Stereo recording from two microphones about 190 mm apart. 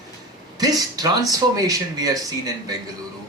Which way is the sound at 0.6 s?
20° right (ahead or behind).